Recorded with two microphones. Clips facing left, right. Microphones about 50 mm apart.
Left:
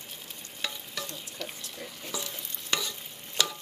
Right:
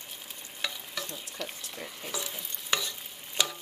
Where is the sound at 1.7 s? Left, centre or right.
Centre.